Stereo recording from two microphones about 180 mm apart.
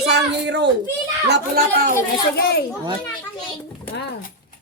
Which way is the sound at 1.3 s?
55° right (ahead or behind).